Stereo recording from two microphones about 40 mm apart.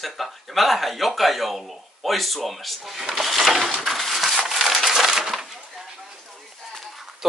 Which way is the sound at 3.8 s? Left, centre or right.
Centre.